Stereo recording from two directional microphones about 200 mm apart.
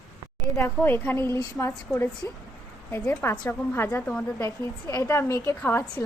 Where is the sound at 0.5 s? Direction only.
10° left (ahead or behind).